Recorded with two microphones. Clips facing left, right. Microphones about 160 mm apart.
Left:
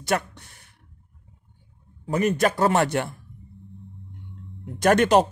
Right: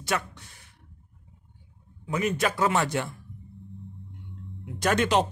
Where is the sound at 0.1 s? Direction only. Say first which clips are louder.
Left 5 dB; 55° left (ahead or behind).